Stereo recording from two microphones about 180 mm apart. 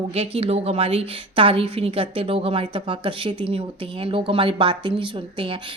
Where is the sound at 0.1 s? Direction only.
35° right (ahead or behind).